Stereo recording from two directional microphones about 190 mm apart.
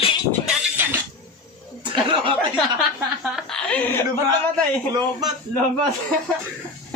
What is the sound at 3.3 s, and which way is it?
Chuckle, 5° left (ahead or behind).